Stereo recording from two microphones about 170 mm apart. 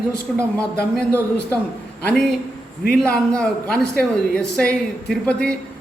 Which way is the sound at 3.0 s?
5° left (ahead or behind).